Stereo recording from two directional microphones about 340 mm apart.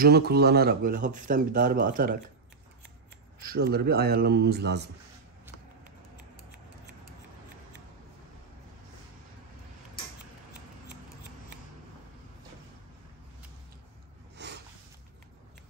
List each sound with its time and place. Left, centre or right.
0.0 s speech: right
3.3 s speech: right
14.3 s a sound: right